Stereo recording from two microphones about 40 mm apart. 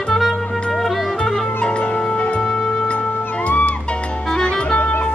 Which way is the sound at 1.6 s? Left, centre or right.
Left.